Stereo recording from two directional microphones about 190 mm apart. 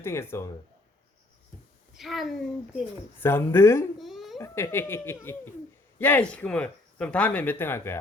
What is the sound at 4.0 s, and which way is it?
Babbling, centre (ahead or behind).